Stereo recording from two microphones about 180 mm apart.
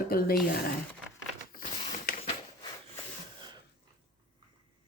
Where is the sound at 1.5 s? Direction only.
50° left (ahead or behind).